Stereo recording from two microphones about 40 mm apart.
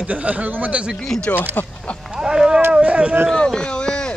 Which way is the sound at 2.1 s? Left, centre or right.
Centre.